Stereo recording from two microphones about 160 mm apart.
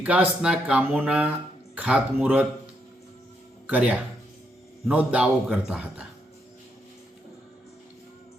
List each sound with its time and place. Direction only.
0.0 s speech: 10° right (ahead or behind)
3.7 s speech: 10° right (ahead or behind)